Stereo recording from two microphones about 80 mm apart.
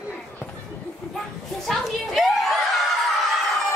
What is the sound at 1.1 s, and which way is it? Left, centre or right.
Speech, centre.